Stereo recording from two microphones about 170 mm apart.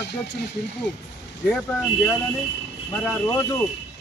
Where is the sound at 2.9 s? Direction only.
15° left (ahead or behind).